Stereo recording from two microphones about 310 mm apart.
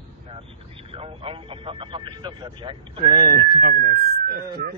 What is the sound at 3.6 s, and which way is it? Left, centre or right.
Speech, right.